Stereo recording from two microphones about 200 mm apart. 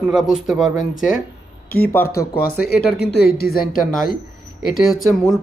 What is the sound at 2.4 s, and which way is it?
Speech, 50° left (ahead or behind).